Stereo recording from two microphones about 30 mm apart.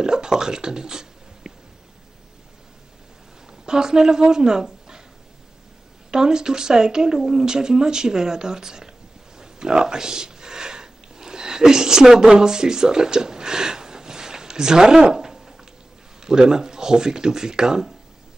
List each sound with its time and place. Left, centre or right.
0.0 s speech: right
3.6 s a woman's voice: right
6.1 s speech: right
9.4 s a sound: right
16.2 s speech: right